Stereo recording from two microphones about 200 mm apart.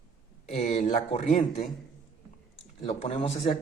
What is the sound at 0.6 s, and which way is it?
Speech, 35° left (ahead or behind).